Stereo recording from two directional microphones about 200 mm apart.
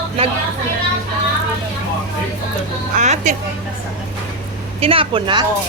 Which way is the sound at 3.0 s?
35° right (ahead or behind).